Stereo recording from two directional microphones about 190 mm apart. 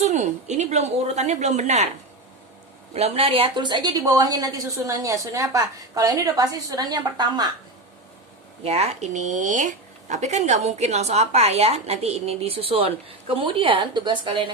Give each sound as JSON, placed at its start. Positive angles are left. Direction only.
{"t": 0.0, "sound": "speech", "side_deg": -35}
{"t": 2.9, "sound": "a woman's voice", "side_deg": -30}
{"t": 8.6, "sound": "speech", "side_deg": -30}